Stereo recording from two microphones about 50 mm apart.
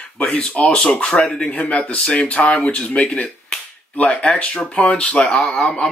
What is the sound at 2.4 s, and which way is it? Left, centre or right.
Speech, left.